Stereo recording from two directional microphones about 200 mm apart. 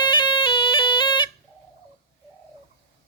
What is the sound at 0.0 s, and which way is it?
Music, 20° left (ahead or behind).